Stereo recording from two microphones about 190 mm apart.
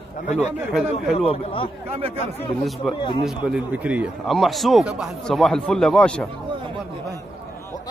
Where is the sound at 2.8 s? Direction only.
Centre (ahead or behind).